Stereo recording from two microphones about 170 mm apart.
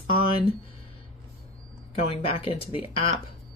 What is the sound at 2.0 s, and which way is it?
Speech, 35° left (ahead or behind).